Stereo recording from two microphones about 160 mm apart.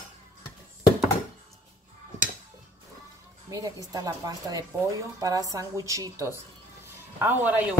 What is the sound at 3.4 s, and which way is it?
Speech, 20° right (ahead or behind).